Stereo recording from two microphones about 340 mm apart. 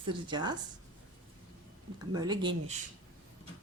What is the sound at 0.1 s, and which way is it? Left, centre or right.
Speech, centre.